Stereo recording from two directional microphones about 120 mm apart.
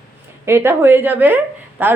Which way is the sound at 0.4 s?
20° right (ahead or behind).